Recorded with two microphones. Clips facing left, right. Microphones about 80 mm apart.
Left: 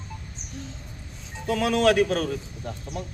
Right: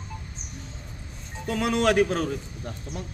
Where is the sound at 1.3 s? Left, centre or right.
Centre.